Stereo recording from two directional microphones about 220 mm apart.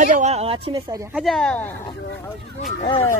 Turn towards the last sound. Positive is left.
turn(degrees=25)  # may be behind; listen again after turning